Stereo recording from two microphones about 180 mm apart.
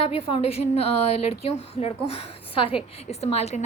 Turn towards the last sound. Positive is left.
turn(degrees=35)  # may be behind; listen again after turning